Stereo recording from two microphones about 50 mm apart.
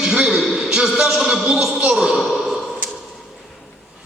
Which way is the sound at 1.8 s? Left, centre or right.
Centre.